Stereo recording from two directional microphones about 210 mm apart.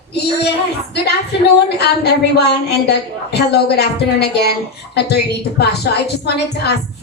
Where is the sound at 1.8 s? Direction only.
50° left (ahead or behind).